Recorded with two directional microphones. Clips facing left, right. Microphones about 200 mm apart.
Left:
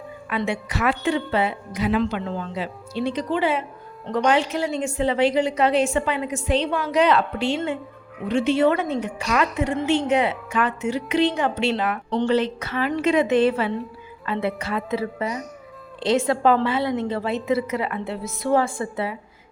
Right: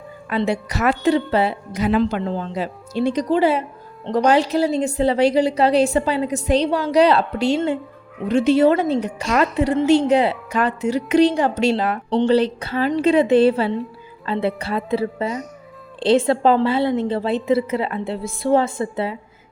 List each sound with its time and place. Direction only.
0.3 s a woman's voice: 35° right (ahead or behind)